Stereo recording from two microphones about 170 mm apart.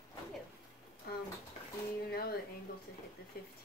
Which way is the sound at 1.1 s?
65° left (ahead or behind).